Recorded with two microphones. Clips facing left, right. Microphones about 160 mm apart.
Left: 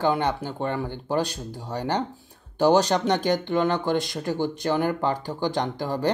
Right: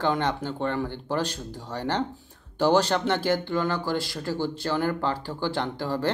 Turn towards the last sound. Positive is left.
turn(degrees=15)  # may be behind; listen again after turning